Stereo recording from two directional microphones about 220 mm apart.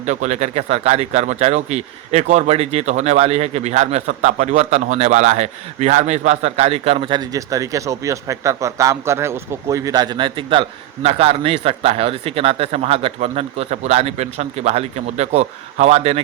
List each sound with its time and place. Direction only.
0.0 s speech: 35° right (ahead or behind)